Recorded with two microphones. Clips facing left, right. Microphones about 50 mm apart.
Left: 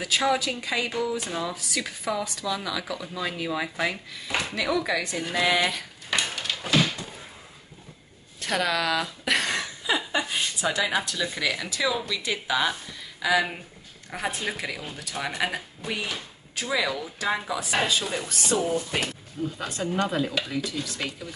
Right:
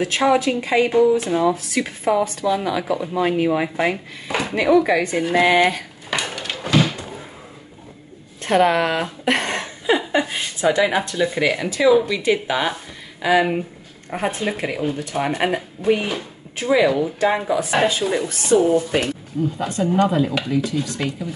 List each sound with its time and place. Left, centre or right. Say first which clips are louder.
0.0 s speech: right 7 dB; right
6.0 s a sound: right 3 dB; centre
8.4 s a woman's voice: right 9 dB; right
16.1 s speech: right 8 dB; right
19.6 s speech: right 9 dB; centre